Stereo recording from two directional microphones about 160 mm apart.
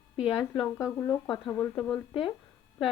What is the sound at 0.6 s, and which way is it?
Speech, 15° left (ahead or behind).